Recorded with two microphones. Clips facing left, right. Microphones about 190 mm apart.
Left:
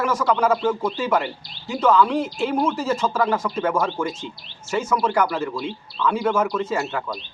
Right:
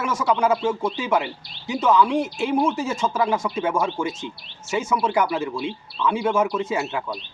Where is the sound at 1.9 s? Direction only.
15° right (ahead or behind).